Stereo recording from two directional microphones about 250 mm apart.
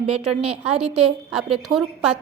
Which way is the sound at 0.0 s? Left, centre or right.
Right.